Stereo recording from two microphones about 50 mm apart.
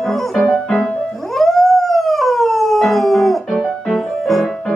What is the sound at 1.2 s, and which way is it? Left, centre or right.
Howl, centre.